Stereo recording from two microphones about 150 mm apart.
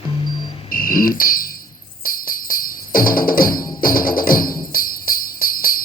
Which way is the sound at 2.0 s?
70° left (ahead or behind).